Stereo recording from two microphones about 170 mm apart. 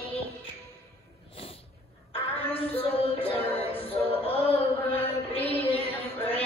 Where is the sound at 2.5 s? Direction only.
35° left (ahead or behind).